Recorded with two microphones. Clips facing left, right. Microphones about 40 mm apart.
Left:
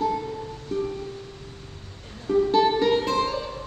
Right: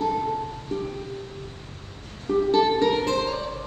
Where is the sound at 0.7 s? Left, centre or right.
Centre.